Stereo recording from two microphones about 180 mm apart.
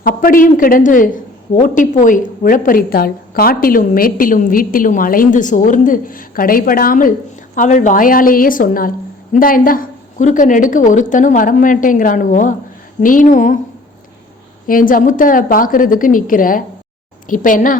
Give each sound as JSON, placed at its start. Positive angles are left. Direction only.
{"t": 0.0, "sound": "a woman's voice", "side_deg": 50}
{"t": 14.7, "sound": "a woman's voice", "side_deg": 50}